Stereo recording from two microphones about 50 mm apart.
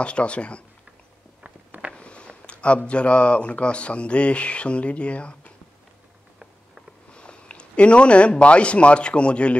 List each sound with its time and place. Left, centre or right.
0.0 s speech: left
1.4 s walk: right
2.0 s speech: left
7.1 s speech: left